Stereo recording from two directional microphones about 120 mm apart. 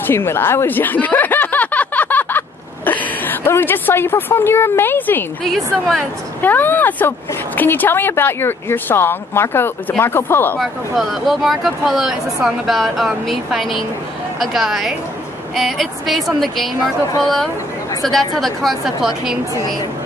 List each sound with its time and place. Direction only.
0.0 s a sound: 20° left (ahead or behind)
5.4 s speech: centre (ahead or behind)
6.4 s speech: 15° left (ahead or behind)
10.6 s speech: centre (ahead or behind)